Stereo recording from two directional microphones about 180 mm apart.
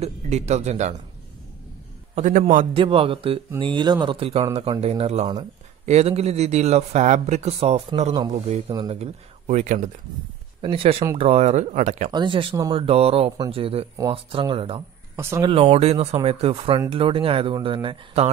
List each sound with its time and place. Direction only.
0.0 s speech: 40° right (ahead or behind)
2.1 s a man's voice: 40° right (ahead or behind)
2.7 s speech: 30° right (ahead or behind)
10.6 s speech: 30° right (ahead or behind)
12.1 s speech: 25° right (ahead or behind)
15.1 s speech: 15° right (ahead or behind)
15.5 s speech: 35° right (ahead or behind)